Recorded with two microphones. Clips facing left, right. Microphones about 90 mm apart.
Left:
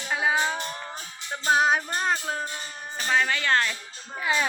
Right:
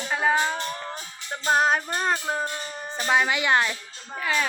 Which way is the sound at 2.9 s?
20° right (ahead or behind).